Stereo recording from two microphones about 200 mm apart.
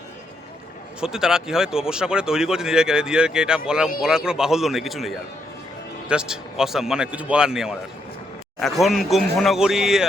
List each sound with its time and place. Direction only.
1.0 s speech: 5° right (ahead or behind)